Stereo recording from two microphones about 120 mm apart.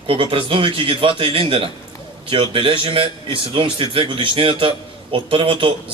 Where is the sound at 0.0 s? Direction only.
45° right (ahead or behind).